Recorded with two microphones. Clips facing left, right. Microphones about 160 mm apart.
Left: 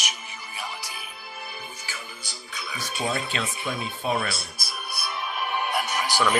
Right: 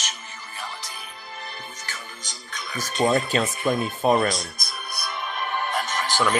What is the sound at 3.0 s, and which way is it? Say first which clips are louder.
Speech: right 8 dB; 45° right (ahead or behind).